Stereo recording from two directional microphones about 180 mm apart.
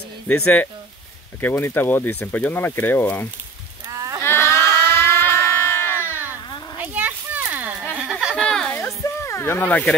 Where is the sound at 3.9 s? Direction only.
20° right (ahead or behind).